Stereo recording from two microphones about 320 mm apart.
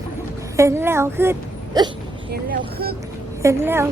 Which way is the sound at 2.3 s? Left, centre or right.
Right.